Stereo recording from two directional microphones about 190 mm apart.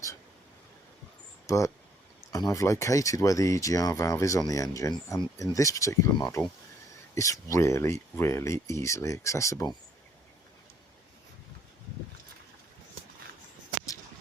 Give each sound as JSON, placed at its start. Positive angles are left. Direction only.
{"t": 1.5, "sound": "speech", "side_deg": 15}